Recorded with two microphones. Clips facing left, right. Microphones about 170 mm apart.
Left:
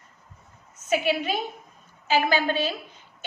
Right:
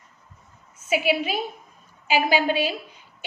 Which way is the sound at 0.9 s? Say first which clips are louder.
Right 1 dB; 5° right (ahead or behind).